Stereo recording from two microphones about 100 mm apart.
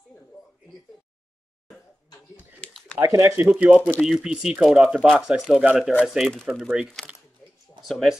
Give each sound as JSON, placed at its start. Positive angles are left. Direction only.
{"t": 2.6, "sound": "typing", "side_deg": 10}
{"t": 3.1, "sound": "speech", "side_deg": -30}
{"t": 3.4, "sound": "speech", "side_deg": -15}